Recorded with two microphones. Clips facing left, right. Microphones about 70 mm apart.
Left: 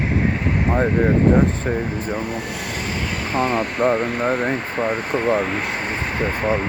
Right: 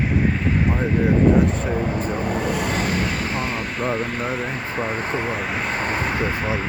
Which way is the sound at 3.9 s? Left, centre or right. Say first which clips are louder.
Left 4 dB; left.